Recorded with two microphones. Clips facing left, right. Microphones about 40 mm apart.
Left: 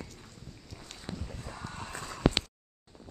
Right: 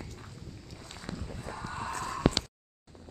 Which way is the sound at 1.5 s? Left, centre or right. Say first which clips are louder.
Right 6 dB; right.